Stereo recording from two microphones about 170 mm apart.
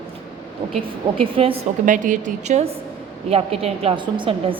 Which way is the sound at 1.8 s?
50° right (ahead or behind).